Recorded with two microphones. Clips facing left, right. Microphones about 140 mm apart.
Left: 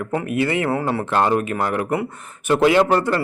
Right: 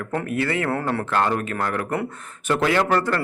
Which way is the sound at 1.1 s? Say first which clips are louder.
Left 4 dB; 20° left (ahead or behind).